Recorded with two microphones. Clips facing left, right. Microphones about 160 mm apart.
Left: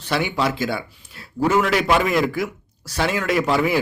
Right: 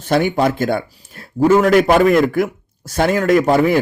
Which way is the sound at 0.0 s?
45° right (ahead or behind).